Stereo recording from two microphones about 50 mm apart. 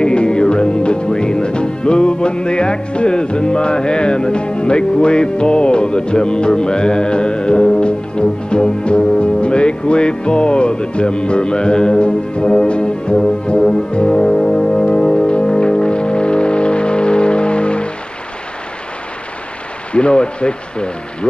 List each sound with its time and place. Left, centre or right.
0.0 s music: centre
19.9 s speech: left